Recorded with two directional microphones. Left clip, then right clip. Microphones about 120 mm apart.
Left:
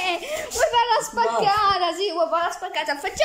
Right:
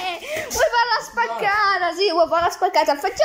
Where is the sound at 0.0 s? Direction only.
20° left (ahead or behind).